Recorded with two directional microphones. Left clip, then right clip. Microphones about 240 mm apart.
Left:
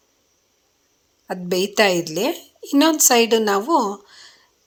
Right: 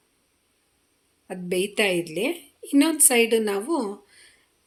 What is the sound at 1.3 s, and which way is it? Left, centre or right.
A woman's voice, centre.